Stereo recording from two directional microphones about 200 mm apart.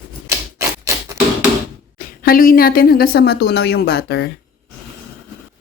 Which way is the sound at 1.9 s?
45° left (ahead or behind).